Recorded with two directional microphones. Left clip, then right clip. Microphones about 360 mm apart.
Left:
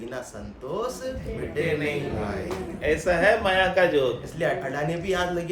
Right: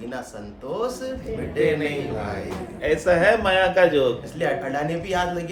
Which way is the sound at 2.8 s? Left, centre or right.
Right.